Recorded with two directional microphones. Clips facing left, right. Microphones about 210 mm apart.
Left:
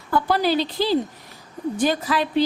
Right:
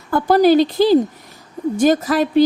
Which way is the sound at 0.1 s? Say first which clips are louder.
Right 8 dB; 45° right (ahead or behind).